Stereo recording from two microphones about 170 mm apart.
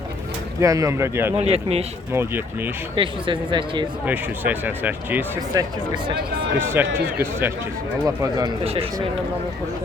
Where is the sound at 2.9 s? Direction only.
30° right (ahead or behind).